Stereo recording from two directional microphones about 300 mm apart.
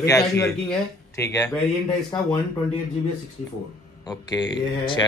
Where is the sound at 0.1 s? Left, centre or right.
Centre.